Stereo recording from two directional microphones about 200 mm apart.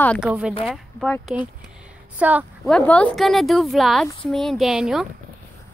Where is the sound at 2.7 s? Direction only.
5° left (ahead or behind).